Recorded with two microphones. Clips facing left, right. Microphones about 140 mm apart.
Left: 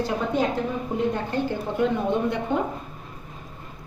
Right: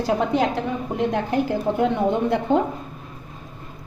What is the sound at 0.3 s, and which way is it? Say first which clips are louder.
A woman's voice: right 2 dB; 90° right.